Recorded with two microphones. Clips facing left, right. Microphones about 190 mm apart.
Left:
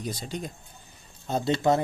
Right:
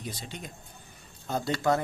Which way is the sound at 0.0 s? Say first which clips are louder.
Left 6 dB; 40° left (ahead or behind).